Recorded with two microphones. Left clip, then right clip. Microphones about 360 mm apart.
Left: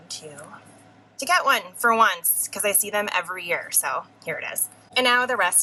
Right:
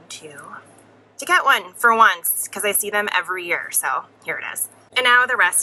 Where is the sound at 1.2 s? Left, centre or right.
Centre.